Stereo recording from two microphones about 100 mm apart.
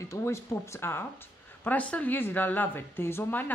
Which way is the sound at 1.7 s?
15° left (ahead or behind).